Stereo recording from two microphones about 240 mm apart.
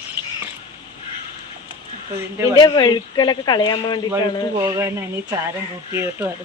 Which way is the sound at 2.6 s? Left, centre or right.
Centre.